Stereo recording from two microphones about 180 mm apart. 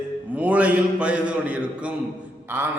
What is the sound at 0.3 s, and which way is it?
A man's voice, 10° right (ahead or behind).